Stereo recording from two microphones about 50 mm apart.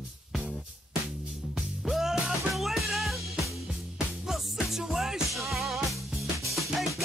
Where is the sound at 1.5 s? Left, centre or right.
Centre.